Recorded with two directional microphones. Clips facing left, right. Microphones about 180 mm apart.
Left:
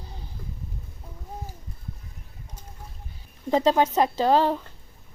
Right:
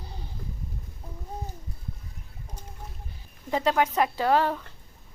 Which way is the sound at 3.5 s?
30° left (ahead or behind).